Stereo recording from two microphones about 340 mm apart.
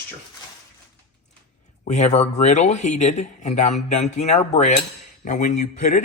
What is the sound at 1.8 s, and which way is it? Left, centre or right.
Speech, left.